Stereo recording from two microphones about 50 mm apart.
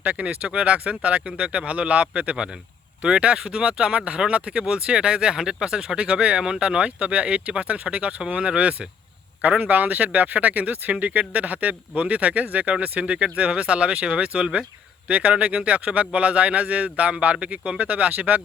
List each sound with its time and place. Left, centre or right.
0.0 s speech: right